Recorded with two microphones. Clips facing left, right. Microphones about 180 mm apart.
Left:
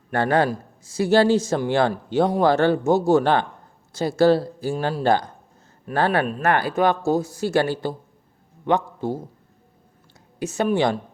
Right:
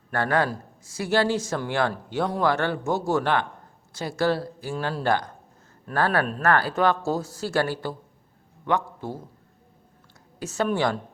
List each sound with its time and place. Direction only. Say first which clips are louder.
0.1 s speech: left 4 dB; 25° left (ahead or behind)
6.4 s a man's voice: left 1 dB; 20° left (ahead or behind)
10.4 s speech: left 4 dB; 15° left (ahead or behind)